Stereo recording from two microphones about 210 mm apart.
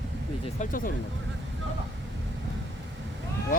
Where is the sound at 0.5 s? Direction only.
40° left (ahead or behind).